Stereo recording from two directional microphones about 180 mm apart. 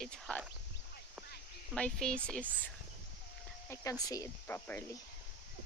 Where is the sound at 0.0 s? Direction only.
5° left (ahead or behind).